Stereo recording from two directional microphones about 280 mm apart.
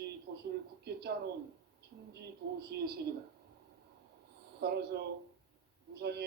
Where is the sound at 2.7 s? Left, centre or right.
Right.